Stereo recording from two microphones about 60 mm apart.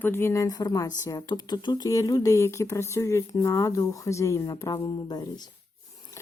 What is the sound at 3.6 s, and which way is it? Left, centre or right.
Speech, left.